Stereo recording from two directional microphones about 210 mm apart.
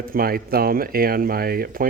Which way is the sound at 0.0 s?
45° right (ahead or behind).